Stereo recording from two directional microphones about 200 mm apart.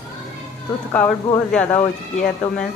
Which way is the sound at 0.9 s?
5° left (ahead or behind).